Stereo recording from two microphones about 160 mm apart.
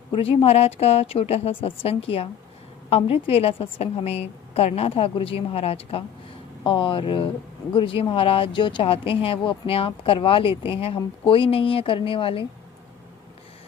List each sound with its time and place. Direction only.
0.1 s a woman's voice: 35° left (ahead or behind)